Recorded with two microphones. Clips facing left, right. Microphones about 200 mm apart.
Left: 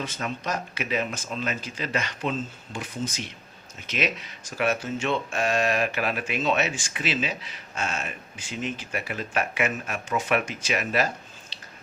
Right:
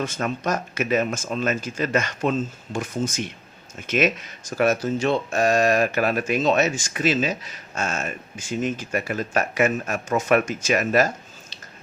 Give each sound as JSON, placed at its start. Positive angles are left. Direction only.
{"t": 0.0, "sound": "speech", "side_deg": -45}